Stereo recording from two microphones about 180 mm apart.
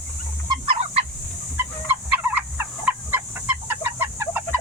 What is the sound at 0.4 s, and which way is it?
Fowl, 30° right (ahead or behind).